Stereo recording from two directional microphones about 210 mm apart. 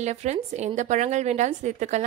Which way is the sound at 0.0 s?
35° right (ahead or behind).